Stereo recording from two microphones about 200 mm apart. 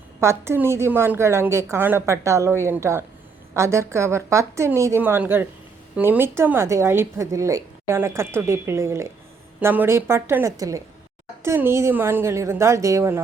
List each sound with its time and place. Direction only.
0.2 s speech: 15° right (ahead or behind)